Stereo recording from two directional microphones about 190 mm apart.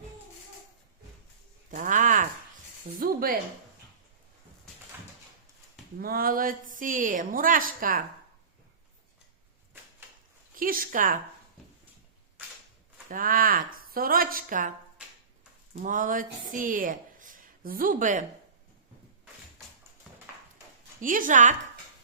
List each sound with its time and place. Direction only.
1.7 s a sound: 45° right (ahead or behind)
3.0 s a woman's voice: 50° right (ahead or behind)
6.0 s a woman's voice: 50° right (ahead or behind)
10.5 s a woman's voice: 50° right (ahead or behind)
13.1 s a woman's voice: 45° right (ahead or behind)
15.0 s finger snapping: 5° right (ahead or behind)
15.8 s speech: 45° right (ahead or behind)
21.0 s a woman's voice: 45° right (ahead or behind)